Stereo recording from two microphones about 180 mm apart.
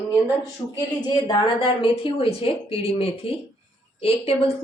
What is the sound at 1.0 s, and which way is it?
A woman's voice, 25° left (ahead or behind).